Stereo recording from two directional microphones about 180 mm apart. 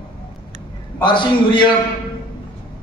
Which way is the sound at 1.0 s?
25° left (ahead or behind).